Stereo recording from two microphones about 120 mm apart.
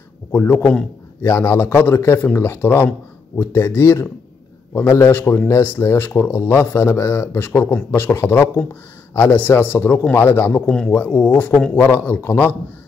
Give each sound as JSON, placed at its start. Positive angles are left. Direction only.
{"t": 0.3, "sound": "a man's voice", "side_deg": 15}
{"t": 10.5, "sound": "a man's voice", "side_deg": 10}